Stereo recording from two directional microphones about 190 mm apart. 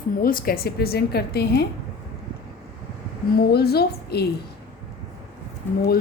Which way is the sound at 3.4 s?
55° left (ahead or behind).